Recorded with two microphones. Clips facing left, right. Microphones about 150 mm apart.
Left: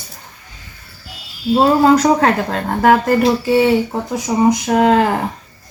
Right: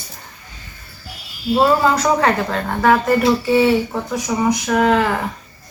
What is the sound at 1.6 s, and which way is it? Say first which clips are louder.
Speech: left 4 dB; 35° left (ahead or behind).